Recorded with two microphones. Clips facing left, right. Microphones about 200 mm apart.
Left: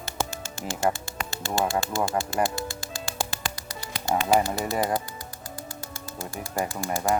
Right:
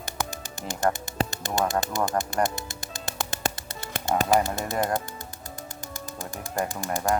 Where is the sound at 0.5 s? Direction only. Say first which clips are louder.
Even; 20° right (ahead or behind).